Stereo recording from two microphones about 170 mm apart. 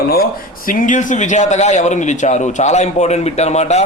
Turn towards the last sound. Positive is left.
turn(degrees=40)  # may be behind; listen again after turning